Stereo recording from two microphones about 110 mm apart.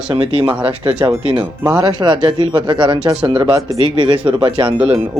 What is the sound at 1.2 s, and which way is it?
Speech, 55° right (ahead or behind).